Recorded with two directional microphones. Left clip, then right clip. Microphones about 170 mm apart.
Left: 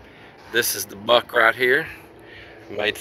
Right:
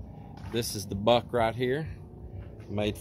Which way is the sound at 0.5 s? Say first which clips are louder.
Left 11 dB; 5° right (ahead or behind).